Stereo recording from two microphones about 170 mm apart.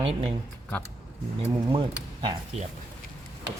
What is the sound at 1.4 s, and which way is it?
Speech, 30° right (ahead or behind).